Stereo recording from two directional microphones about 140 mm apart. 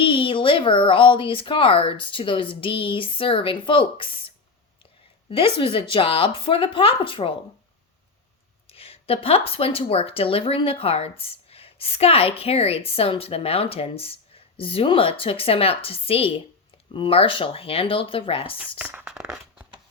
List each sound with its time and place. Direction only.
0.0 s speech: 40° left (ahead or behind)
5.5 s speech: 40° left (ahead or behind)
8.6 s speech: 45° left (ahead or behind)
18.8 s a sound: 10° right (ahead or behind)